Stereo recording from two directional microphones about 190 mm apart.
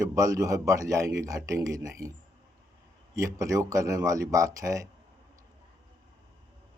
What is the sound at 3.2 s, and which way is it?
Speech, 15° right (ahead or behind).